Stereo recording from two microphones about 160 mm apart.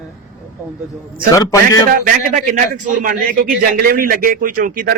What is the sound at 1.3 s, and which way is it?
Speech, 20° left (ahead or behind).